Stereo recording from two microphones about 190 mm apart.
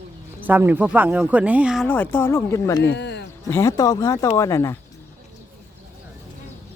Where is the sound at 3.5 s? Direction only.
15° left (ahead or behind).